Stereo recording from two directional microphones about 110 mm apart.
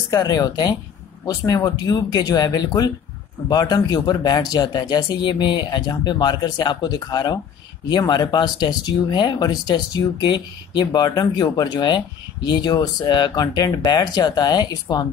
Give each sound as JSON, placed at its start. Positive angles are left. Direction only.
{"t": 0.1, "sound": "speech", "side_deg": 35}